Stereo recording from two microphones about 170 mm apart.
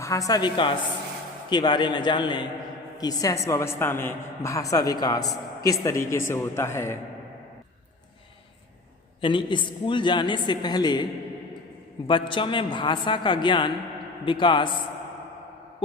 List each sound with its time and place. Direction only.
0.0 s a woman's voice: 20° left (ahead or behind)
9.2 s a woman's voice: 30° left (ahead or behind)
12.0 s a woman's voice: 30° left (ahead or behind)